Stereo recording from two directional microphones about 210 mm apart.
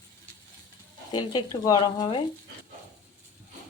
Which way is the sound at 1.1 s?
20° left (ahead or behind).